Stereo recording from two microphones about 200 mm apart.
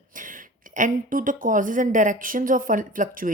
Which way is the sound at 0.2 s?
40° right (ahead or behind).